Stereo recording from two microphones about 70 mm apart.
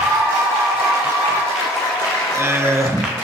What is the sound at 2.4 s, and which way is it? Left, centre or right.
Speech, right.